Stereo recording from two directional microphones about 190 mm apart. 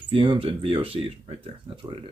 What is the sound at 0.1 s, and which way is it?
Speech, 25° right (ahead or behind).